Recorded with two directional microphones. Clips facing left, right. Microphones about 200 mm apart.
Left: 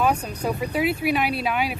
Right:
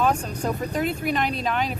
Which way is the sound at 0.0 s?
5° left (ahead or behind).